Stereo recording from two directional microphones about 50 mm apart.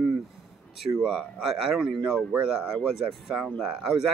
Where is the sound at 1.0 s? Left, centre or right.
Centre.